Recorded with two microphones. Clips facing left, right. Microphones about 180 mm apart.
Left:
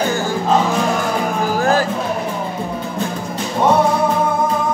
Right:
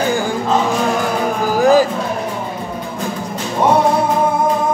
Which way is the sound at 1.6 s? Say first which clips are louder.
Right 7 dB; 15° right (ahead or behind).